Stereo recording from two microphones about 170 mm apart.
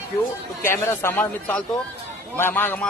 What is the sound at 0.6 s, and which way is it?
Speech, 15° left (ahead or behind).